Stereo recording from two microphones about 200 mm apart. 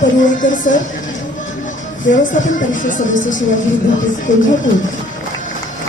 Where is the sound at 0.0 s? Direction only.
40° left (ahead or behind).